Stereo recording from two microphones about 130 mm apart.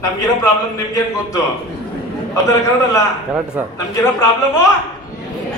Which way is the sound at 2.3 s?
25° left (ahead or behind).